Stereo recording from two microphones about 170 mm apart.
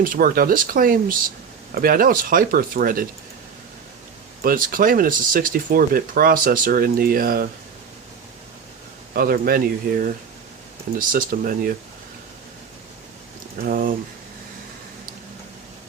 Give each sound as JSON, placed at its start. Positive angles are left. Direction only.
{"t": 0.0, "sound": "speech", "side_deg": -55}
{"t": 4.4, "sound": "speech", "side_deg": -55}
{"t": 9.1, "sound": "speech", "side_deg": -60}
{"t": 13.7, "sound": "speech", "side_deg": -55}